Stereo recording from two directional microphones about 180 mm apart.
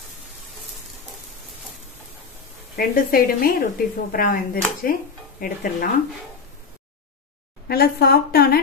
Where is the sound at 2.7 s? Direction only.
55° left (ahead or behind).